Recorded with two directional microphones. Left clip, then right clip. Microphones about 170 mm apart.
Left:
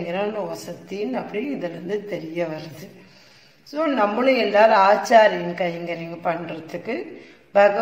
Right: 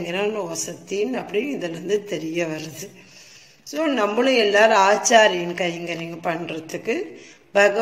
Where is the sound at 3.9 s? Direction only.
10° right (ahead or behind).